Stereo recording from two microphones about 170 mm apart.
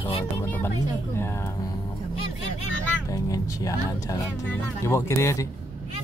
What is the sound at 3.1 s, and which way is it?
Speech, 20° left (ahead or behind).